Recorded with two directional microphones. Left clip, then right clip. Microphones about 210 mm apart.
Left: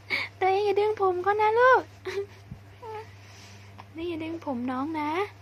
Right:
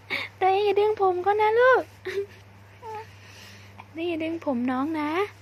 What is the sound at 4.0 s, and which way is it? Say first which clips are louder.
A woman's voice: right 5 dB; 15° right (ahead or behind).